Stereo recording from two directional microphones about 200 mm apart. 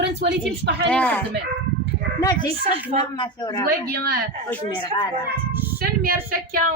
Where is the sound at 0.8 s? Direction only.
5° left (ahead or behind).